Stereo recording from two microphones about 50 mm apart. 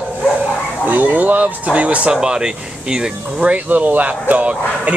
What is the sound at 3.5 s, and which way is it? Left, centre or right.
Speech, right.